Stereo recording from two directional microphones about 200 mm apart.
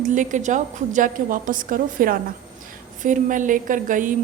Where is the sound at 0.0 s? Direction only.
40° right (ahead or behind).